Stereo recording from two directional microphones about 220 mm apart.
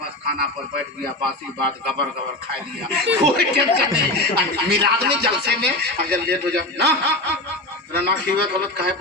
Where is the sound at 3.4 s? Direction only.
45° right (ahead or behind).